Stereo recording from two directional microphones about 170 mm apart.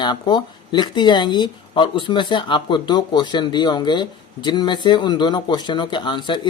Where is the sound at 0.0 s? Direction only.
25° left (ahead or behind).